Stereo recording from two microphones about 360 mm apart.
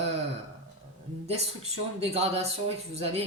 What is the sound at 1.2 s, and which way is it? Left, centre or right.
Speech, centre.